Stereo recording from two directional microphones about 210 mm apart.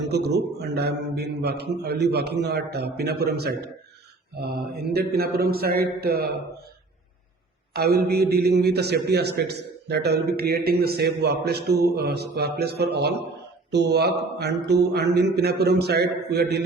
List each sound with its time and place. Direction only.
0.1 s a man's voice: 50° right (ahead or behind)
7.7 s a man's voice: 50° right (ahead or behind)